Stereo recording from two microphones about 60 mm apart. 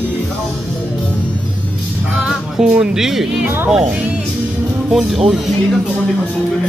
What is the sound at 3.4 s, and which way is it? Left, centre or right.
Speech, right.